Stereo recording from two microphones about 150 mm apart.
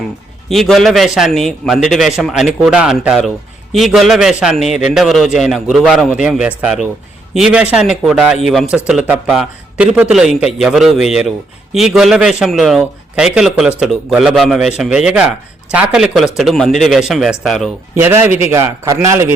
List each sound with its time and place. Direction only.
0.4 s a man's voice: centre (ahead or behind)
17.9 s a man's voice: 15° right (ahead or behind)